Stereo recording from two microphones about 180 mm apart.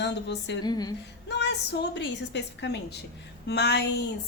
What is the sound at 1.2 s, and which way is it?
Speech, 75° left (ahead or behind).